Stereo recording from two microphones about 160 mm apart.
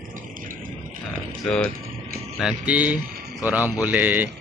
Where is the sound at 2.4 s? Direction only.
5° right (ahead or behind).